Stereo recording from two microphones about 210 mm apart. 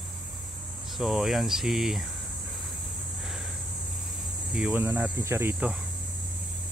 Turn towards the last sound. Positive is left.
turn(degrees=-10)  # may be behind; listen again after turning